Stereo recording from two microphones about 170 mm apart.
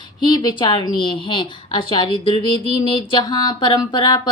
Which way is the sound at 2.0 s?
30° left (ahead or behind).